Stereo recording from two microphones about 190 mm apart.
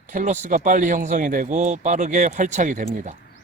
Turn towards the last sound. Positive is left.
turn(degrees=-40)  # may be behind; listen again after turning